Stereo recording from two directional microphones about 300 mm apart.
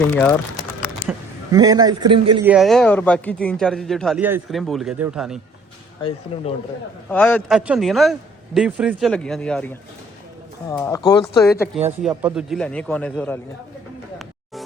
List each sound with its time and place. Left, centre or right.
0.1 s speech: centre
1.5 s a man's voice: centre
2.5 s speech: centre
6.0 s speech: centre
7.1 s speech: centre
12.0 s speech: centre